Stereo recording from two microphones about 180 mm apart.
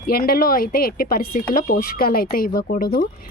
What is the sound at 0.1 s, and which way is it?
Speech, 55° left (ahead or behind).